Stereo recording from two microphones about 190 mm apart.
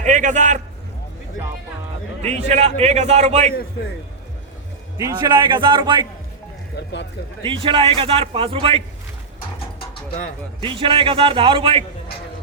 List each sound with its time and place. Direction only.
0.0 s a man's voice: 40° right (ahead or behind)
2.2 s a man's voice: 35° right (ahead or behind)
4.9 s a man's voice: 20° right (ahead or behind)
7.4 s a man's voice: 25° right (ahead or behind)
10.6 s a man's voice: 30° right (ahead or behind)